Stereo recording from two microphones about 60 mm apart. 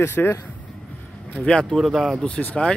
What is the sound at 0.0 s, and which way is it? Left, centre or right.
Speech, left.